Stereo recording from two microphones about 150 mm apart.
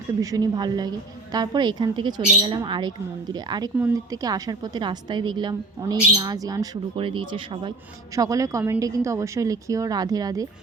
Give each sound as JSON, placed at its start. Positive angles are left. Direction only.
{"t": 0.2, "sound": "a woman's voice", "side_deg": -25}
{"t": 6.9, "sound": "speech", "side_deg": -35}
{"t": 8.1, "sound": "a woman's voice", "side_deg": -20}